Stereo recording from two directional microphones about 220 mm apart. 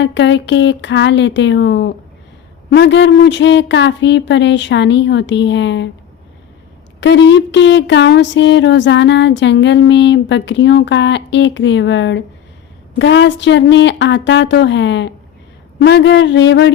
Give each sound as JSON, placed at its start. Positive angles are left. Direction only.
{"t": 0.0, "sound": "speech", "side_deg": 55}
{"t": 7.0, "sound": "speech", "side_deg": 55}